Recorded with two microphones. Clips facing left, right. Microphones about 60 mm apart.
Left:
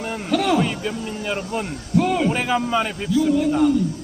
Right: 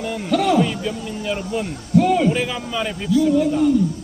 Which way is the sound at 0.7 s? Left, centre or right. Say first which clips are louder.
Right 1 dB; left.